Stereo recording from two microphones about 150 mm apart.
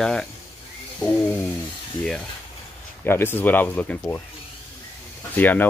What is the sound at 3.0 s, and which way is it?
Speech, 15° left (ahead or behind).